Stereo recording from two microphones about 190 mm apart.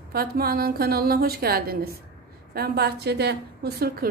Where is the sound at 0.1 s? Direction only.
50° right (ahead or behind).